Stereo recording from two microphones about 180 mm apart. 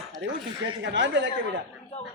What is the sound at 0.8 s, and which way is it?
Speech, 90° right.